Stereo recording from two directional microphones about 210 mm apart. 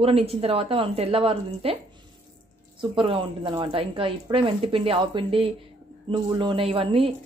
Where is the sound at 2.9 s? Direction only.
25° right (ahead or behind).